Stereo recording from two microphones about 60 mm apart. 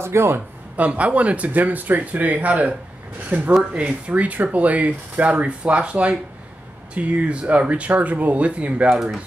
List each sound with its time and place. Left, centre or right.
0.0 s a man's voice: right
0.7 s speech: right
8.9 s speech: centre